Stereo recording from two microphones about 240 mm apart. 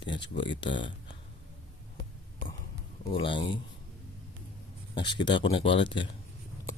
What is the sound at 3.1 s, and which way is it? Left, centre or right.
Speech, left.